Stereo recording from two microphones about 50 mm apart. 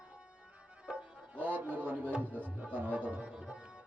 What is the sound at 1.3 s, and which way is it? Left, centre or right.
Speech, right.